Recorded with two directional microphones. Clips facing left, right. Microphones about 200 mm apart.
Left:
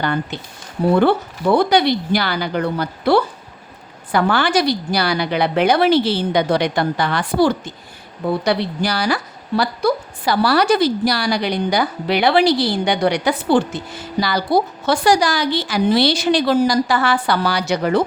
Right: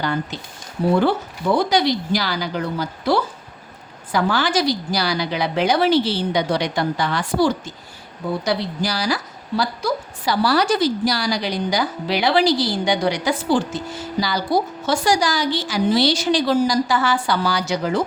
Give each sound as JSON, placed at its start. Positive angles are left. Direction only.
{"t": 0.0, "sound": "a woman's voice", "side_deg": 60}